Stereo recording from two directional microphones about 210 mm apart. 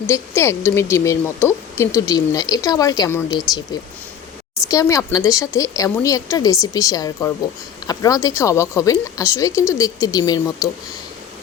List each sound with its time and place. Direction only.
0.1 s speech: 15° left (ahead or behind)
4.7 s speech: 15° left (ahead or behind)